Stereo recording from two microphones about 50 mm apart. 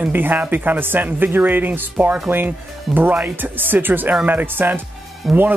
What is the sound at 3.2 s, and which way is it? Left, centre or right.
Speech, right.